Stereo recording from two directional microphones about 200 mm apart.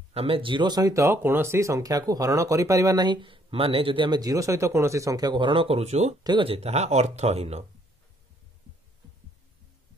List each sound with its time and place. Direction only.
0.1 s speech: 30° right (ahead or behind)